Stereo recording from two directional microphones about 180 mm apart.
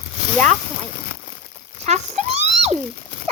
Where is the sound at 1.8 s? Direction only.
40° right (ahead or behind).